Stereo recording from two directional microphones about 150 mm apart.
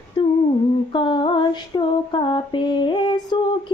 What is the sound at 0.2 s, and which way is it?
Humming, 30° left (ahead or behind).